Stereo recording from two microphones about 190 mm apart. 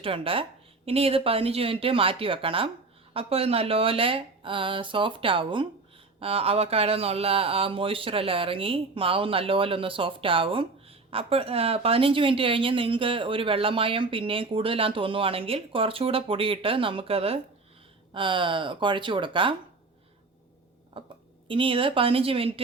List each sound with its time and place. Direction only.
0.0 s speech: 30° right (ahead or behind)
20.9 s speech: 30° right (ahead or behind)